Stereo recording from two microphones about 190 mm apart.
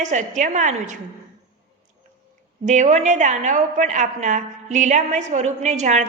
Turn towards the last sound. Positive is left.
turn(degrees=-40)  # may be behind; listen again after turning